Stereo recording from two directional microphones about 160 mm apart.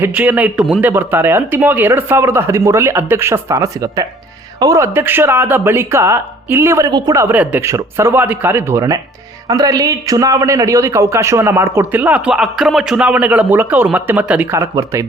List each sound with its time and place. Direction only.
0.0 s speech: 10° right (ahead or behind)